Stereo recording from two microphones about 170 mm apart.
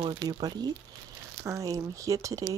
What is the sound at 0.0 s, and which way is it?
Speech, 25° right (ahead or behind).